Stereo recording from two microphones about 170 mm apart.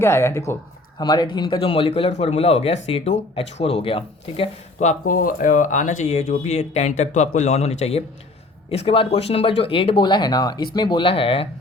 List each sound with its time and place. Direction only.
0.0 s speech: 15° left (ahead or behind); by 11.4 s 35° left (ahead or behind)